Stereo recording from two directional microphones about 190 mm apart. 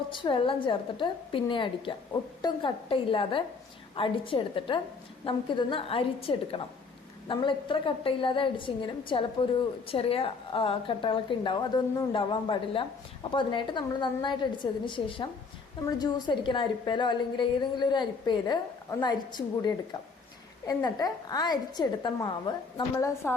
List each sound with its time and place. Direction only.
0.1 s a woman's voice: 25° left (ahead or behind)